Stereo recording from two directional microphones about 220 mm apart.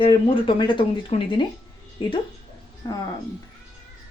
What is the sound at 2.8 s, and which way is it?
Speech, 15° left (ahead or behind).